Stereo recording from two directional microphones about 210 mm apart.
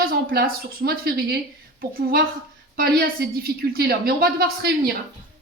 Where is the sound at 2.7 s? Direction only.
45° right (ahead or behind).